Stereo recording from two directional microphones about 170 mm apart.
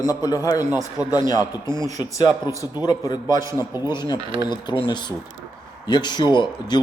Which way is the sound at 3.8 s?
15° right (ahead or behind).